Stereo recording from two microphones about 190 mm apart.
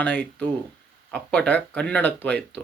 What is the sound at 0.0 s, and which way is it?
A man's voice, 5° left (ahead or behind).